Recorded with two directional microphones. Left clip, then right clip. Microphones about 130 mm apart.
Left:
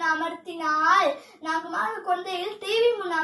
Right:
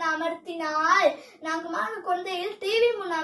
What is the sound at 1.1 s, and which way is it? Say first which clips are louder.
A child's voice: left 3 dB; 35° right (ahead or behind).